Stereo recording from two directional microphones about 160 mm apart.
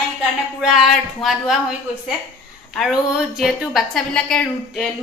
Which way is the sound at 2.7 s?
Centre (ahead or behind).